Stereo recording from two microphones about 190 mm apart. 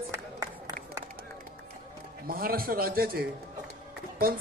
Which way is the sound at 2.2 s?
50° right (ahead or behind).